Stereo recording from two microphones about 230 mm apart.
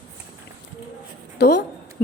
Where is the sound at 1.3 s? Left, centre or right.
Left.